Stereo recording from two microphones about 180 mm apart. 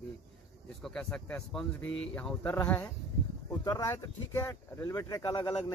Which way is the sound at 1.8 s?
90° left.